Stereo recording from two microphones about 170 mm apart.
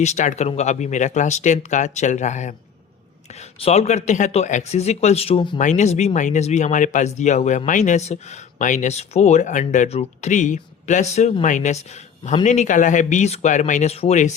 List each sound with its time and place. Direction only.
0.0 s speech: 45° left (ahead or behind)
3.6 s speech: 40° left (ahead or behind)
5.5 s speech: 45° left (ahead or behind)